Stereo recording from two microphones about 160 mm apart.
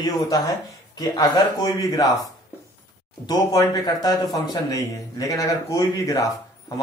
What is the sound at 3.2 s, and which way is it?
A man's voice, 25° left (ahead or behind).